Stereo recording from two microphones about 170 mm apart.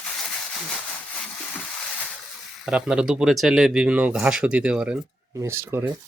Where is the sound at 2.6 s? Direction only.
5° right (ahead or behind).